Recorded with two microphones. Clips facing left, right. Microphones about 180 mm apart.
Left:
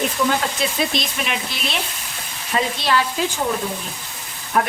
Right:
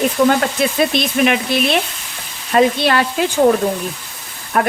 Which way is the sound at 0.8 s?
60° right (ahead or behind).